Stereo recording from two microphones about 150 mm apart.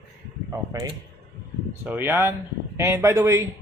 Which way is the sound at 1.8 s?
15° right (ahead or behind).